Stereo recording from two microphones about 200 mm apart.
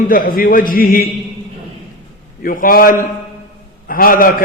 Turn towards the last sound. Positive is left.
turn(degrees=45)  # may be behind; listen again after turning